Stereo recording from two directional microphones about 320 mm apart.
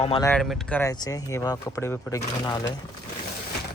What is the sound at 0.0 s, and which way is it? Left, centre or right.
Speech, centre.